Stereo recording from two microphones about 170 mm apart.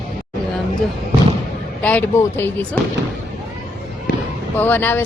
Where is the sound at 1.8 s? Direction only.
10° left (ahead or behind).